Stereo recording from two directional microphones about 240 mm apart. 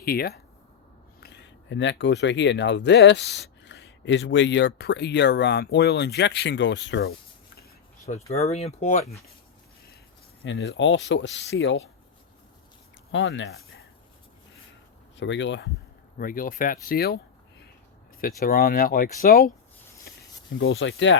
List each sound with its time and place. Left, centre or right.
0.0 s speech: left
8.3 s speech: left
10.4 s speech: left
13.1 s speech: left
15.2 s speech: left
16.1 s speech: left
18.2 s speech: left
20.1 s a sound: left
20.6 s speech: left